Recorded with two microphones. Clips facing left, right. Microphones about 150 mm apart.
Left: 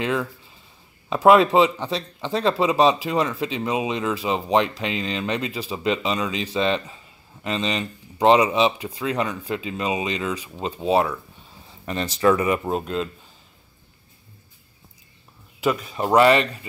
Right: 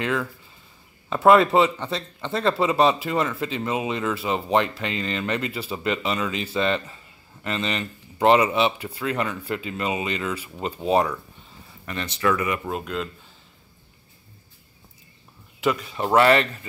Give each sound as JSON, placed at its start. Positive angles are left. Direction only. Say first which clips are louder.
{"t": 0.0, "sound": "speech", "louder": "left 1 dB", "side_deg": 20}
{"t": 10.8, "sound": "speech", "louder": "left 1 dB", "side_deg": 5}
{"t": 11.8, "sound": "speech", "louder": "left 5 dB", "side_deg": 35}
{"t": 15.7, "sound": "speech", "louder": "left 2 dB", "side_deg": 20}